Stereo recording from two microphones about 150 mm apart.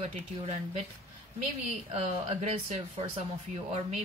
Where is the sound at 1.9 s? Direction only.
55° right (ahead or behind).